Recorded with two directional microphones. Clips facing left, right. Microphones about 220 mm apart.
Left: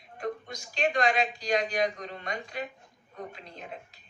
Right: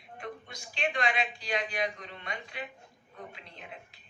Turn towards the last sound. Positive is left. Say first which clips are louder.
# left 5 dB
turn(degrees=40)  # may be behind; listen again after turning